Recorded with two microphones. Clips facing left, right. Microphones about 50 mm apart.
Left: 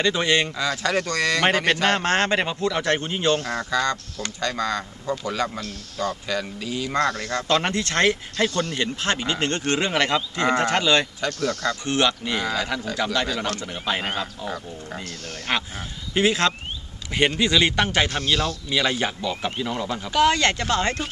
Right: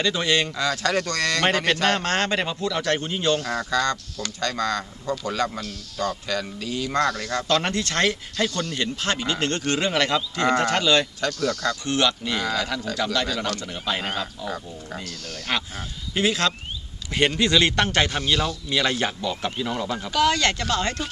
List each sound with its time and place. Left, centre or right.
0.0 s speech: left
0.5 s speech: centre; by 3.7 s left
3.7 s speech: centre
7.0 s speech: left
11.3 s speech: left
12.2 s speech: centre
15.0 s speech: left
15.5 s speech: left
17.1 s speech: centre
18.1 s speech: centre
20.1 s speech: left